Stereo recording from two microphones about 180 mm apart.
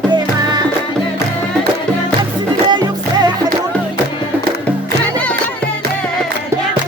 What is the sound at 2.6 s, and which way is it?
Music, 25° right (ahead or behind).